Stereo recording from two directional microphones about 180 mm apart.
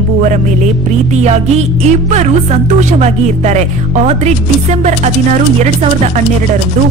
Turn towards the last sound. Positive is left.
turn(degrees=-45)  # may be behind; listen again after turning